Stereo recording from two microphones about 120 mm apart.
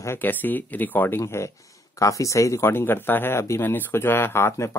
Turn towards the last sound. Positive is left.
turn(degrees=25)  # may be behind; listen again after turning